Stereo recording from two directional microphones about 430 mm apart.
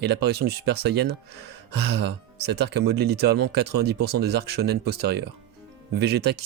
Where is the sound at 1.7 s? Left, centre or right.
Right.